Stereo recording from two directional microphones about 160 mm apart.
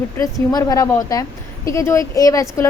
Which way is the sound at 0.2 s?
20° left (ahead or behind).